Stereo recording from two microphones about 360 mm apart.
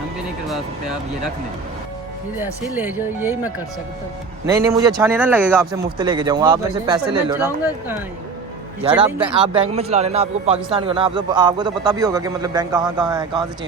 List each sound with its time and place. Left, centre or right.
2.3 s a man's voice: centre